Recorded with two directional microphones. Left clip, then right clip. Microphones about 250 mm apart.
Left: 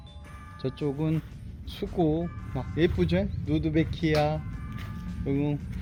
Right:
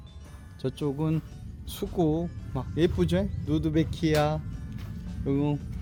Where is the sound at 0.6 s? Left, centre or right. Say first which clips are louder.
Even; centre.